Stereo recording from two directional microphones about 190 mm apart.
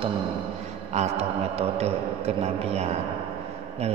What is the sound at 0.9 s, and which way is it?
Mantra, 35° right (ahead or behind).